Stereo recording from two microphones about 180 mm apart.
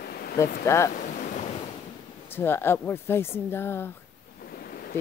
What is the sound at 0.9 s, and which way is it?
Ocean, 40° left (ahead or behind).